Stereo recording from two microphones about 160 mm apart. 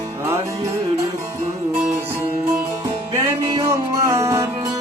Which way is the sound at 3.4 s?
25° right (ahead or behind).